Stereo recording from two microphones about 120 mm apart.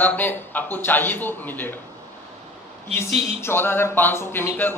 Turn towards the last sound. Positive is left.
turn(degrees=15)  # may be behind; listen again after turning